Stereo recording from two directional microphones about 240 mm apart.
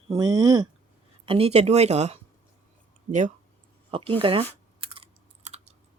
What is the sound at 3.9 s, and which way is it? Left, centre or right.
Chewing, right.